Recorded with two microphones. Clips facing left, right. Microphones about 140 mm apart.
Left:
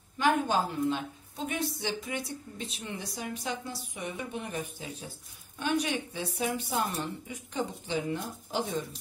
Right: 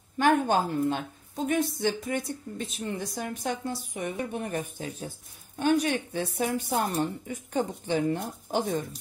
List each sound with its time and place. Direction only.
0.2 s a woman's voice: 50° right (ahead or behind)